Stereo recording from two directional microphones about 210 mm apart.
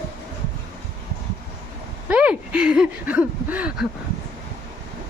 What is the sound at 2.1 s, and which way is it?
Speech, 5° right (ahead or behind).